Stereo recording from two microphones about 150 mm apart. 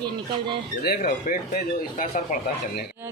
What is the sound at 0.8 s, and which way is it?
Speech, 80° left.